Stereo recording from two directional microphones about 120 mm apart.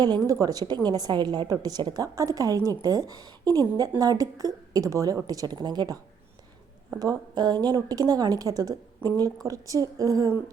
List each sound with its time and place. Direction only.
0.0 s a woman's voice: 30° right (ahead or behind)
7.0 s a woman's voice: 35° right (ahead or behind)